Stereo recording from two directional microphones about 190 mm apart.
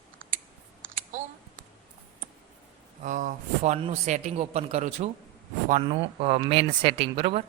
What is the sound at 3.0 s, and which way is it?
Speech, 40° right (ahead or behind).